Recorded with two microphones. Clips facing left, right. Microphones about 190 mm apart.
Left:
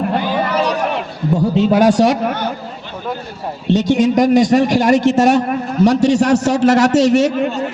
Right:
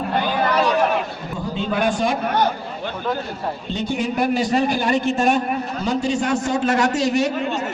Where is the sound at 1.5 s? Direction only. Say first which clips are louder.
Left 9 dB; 80° left.